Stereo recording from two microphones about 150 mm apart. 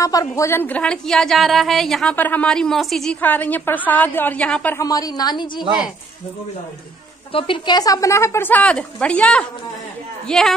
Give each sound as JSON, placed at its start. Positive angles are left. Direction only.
{"t": 0.0, "sound": "a woman's voice", "side_deg": 20}
{"t": 4.7, "sound": "a woman's voice", "side_deg": 25}
{"t": 7.3, "sound": "a woman's voice", "side_deg": 35}